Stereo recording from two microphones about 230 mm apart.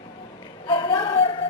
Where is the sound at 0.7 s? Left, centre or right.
Centre.